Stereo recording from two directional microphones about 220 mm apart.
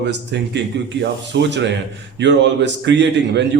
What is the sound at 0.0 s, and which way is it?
A man's voice, 50° right (ahead or behind).